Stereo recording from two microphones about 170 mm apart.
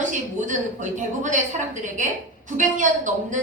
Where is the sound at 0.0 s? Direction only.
45° right (ahead or behind).